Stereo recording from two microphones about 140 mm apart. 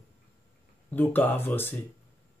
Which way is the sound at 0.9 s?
15° left (ahead or behind).